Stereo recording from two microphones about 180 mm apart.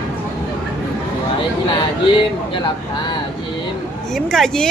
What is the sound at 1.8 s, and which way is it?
Speech, 25° left (ahead or behind).